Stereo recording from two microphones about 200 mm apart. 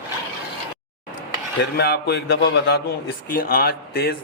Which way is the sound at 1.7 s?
50° left (ahead or behind).